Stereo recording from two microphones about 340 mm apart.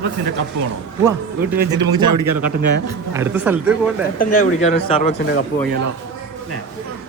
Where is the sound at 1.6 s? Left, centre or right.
Right.